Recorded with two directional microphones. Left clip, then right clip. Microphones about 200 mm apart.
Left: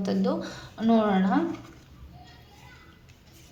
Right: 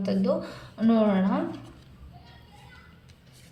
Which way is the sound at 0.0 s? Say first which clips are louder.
Right 1 dB; 30° left (ahead or behind).